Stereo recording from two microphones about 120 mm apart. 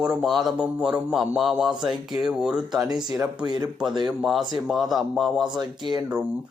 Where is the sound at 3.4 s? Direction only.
35° right (ahead or behind).